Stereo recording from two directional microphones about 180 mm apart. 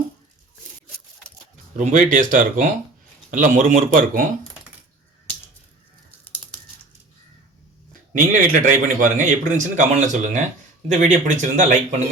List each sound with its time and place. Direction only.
1.7 s speech: 45° right (ahead or behind)
8.1 s speech: 45° right (ahead or behind)